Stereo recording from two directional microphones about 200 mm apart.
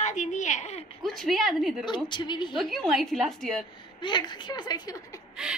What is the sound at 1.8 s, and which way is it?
Speech, 25° left (ahead or behind).